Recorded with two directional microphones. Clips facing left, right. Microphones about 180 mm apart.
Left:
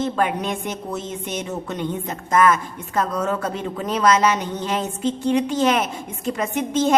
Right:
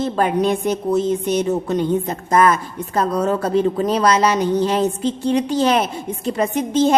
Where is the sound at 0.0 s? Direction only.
35° right (ahead or behind).